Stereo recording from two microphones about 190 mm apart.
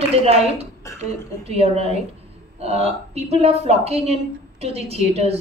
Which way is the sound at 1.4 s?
35° right (ahead or behind).